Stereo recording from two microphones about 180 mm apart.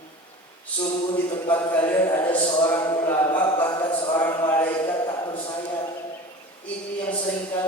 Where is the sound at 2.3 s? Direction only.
25° left (ahead or behind).